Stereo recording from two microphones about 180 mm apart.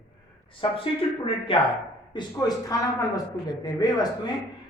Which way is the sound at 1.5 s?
30° left (ahead or behind).